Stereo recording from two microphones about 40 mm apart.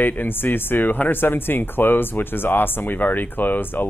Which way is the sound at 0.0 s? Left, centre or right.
Left.